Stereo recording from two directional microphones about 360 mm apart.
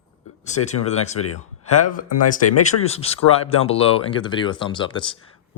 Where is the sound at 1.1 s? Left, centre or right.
Left.